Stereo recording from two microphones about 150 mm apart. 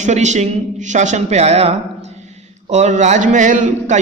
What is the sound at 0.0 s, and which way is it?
A man's voice, 50° right (ahead or behind).